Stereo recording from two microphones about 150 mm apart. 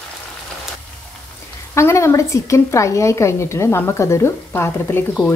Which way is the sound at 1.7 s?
20° left (ahead or behind).